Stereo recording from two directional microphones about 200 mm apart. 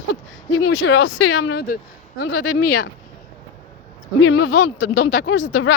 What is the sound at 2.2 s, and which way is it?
Speech, 75° left (ahead or behind).